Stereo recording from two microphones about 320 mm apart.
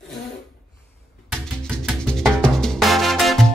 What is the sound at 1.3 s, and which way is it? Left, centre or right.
Music, centre.